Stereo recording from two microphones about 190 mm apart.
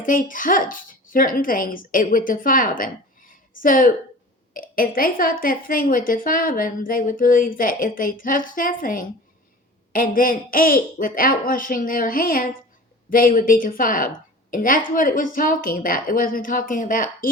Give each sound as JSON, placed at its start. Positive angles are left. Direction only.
{"t": 0.0, "sound": "a woman's voice", "side_deg": 45}